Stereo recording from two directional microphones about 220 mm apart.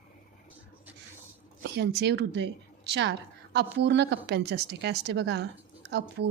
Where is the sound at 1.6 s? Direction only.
50° right (ahead or behind).